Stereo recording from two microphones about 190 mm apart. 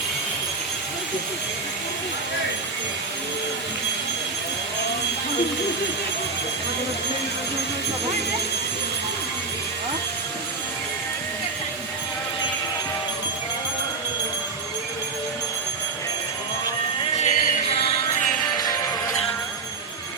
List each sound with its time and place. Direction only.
17.2 s music: 45° left (ahead or behind)
17.7 s music: 30° left (ahead or behind)
18.5 s music: 20° left (ahead or behind)